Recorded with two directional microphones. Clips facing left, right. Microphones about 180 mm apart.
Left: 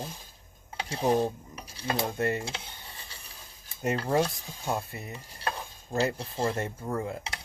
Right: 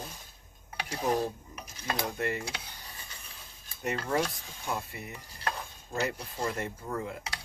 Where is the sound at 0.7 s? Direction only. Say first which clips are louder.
Left 4 dB; 25° left (ahead or behind).